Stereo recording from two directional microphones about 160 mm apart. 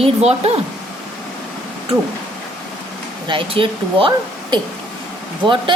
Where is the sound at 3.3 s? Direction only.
30° right (ahead or behind).